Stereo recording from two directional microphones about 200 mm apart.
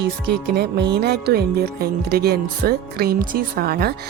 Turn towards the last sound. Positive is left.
turn(degrees=-50)  # may be behind; listen again after turning